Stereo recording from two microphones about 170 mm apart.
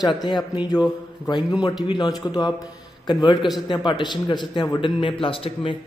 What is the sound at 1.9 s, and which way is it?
A man's voice, 25° left (ahead or behind).